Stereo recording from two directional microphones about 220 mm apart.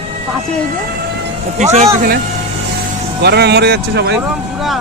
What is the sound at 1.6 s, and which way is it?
Speech, 30° right (ahead or behind).